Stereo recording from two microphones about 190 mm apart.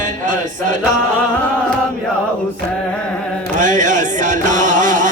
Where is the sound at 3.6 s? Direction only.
40° right (ahead or behind).